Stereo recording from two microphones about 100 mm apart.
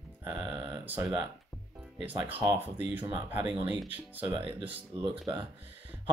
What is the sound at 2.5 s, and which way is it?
Speech, 20° right (ahead or behind).